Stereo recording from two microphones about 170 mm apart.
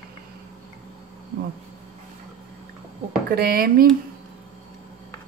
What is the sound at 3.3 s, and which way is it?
Speech, 60° right (ahead or behind).